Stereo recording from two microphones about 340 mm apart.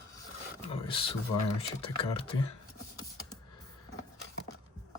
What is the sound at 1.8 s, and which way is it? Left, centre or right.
Speech, centre.